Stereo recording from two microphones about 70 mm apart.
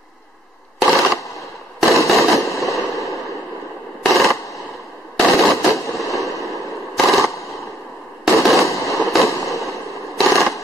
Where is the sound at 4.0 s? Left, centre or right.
Centre.